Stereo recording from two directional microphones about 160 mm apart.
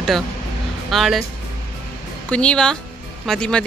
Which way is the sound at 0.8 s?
Centre (ahead or behind).